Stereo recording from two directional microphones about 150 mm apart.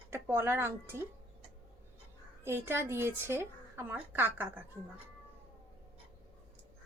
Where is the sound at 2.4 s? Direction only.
15° right (ahead or behind).